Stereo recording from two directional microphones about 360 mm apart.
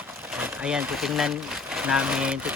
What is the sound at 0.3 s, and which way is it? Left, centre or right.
Speech, centre.